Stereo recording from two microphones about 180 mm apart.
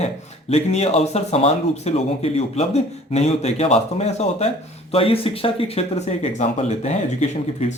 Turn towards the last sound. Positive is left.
turn(degrees=40)  # may be behind; listen again after turning